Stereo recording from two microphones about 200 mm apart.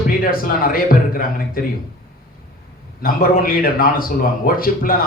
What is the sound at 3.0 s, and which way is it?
Speech, 45° left (ahead or behind).